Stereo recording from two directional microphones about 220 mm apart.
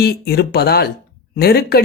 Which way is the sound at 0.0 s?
45° left (ahead or behind).